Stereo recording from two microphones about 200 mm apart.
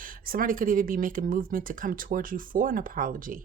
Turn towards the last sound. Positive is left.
turn(degrees=-45)  # may be behind; listen again after turning